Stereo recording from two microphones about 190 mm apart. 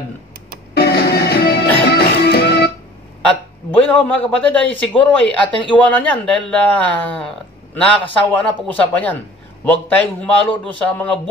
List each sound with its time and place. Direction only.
0.7 s music: 55° left (ahead or behind)
3.9 s speech: 10° left (ahead or behind)